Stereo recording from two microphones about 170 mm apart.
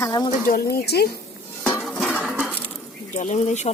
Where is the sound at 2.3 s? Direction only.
10° right (ahead or behind).